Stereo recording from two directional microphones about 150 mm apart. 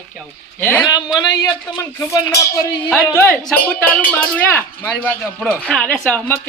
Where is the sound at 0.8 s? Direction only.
30° left (ahead or behind).